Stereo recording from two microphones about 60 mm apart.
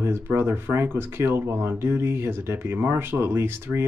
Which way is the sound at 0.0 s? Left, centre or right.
Right.